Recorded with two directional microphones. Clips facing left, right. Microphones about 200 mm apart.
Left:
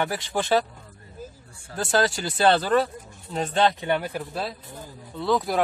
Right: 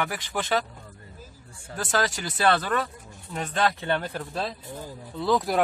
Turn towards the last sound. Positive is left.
turn(degrees=0)  # may be behind; listen again after turning